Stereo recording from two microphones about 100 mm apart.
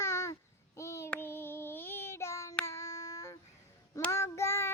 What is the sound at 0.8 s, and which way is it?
Child singing, 30° left (ahead or behind).